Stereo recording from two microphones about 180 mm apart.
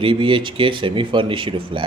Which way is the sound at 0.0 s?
30° right (ahead or behind).